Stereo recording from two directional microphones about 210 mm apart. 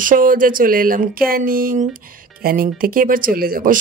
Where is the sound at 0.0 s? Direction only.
40° right (ahead or behind).